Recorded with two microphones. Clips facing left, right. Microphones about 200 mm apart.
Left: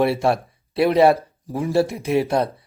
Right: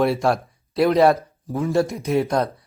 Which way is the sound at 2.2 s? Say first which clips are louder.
Left 1 dB; 30° left (ahead or behind).